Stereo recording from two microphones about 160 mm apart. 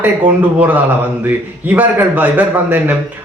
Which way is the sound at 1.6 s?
10° right (ahead or behind).